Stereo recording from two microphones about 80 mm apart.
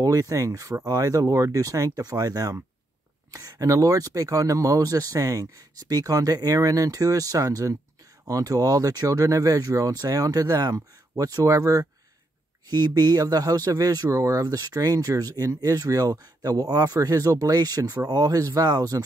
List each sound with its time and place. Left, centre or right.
0.0 s speech: right
12.6 s speech: right